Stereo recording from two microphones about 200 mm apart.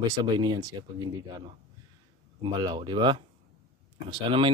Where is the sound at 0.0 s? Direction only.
20° right (ahead or behind).